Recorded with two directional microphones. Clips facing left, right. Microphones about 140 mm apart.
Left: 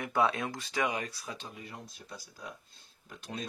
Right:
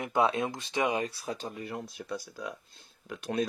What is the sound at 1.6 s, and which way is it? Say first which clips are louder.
Speech: right 8 dB; 60° right (ahead or behind).